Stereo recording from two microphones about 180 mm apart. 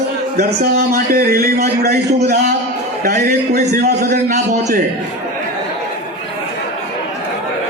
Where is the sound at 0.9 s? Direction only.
55° right (ahead or behind).